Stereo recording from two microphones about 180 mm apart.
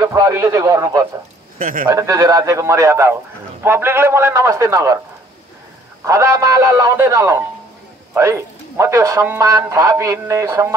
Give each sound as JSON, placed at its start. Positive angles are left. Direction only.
{"t": 0.1, "sound": "a man's voice", "side_deg": -20}
{"t": 1.6, "sound": "speech", "side_deg": -50}
{"t": 1.9, "sound": "a man's voice", "side_deg": -20}
{"t": 6.0, "sound": "a man's voice", "side_deg": -15}